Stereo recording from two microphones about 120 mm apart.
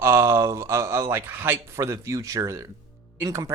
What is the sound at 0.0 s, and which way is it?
Speech, 25° right (ahead or behind).